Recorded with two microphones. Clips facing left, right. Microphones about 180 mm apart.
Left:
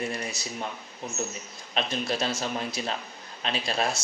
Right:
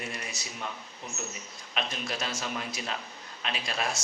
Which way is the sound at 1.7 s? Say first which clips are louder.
Left 5 dB; 30° left (ahead or behind).